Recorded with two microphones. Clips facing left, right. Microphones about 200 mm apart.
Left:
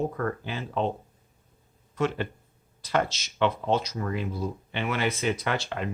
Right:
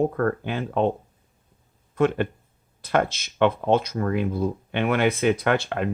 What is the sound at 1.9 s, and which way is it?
Speech, 55° right (ahead or behind).